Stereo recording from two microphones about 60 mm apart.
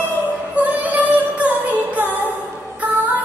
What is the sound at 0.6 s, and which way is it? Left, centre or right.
Female singing, right.